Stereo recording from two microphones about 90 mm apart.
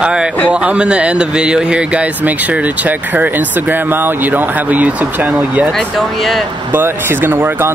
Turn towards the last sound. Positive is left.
turn(degrees=-25)  # may be behind; listen again after turning